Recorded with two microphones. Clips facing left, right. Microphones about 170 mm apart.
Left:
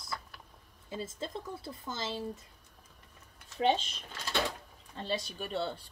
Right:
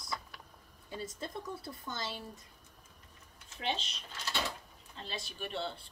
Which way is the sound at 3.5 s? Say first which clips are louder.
Left 9 dB; 40° left (ahead or behind).